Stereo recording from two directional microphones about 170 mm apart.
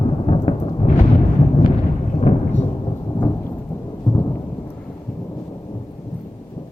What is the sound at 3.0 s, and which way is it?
Thunder, 25° left (ahead or behind).